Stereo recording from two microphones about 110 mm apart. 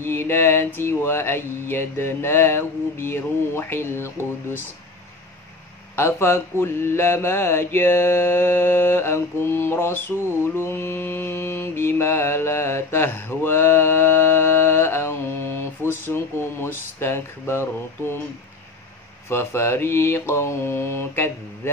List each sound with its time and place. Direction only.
0.0 s mantra: 20° left (ahead or behind)
5.9 s mantra: 25° left (ahead or behind)
19.2 s mantra: 20° left (ahead or behind)